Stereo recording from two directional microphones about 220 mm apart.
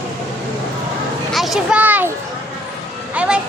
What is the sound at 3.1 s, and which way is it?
Vehicle, 5° right (ahead or behind).